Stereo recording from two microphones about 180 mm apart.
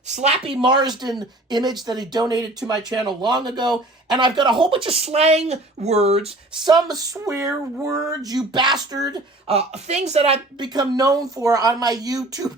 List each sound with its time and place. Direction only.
0.1 s speech: 40° right (ahead or behind)
6.7 s speech: 20° right (ahead or behind)
9.5 s speech: 35° right (ahead or behind); by 12.5 s 20° right (ahead or behind)